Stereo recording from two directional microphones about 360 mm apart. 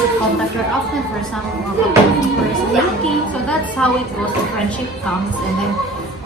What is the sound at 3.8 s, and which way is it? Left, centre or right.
Speech, centre.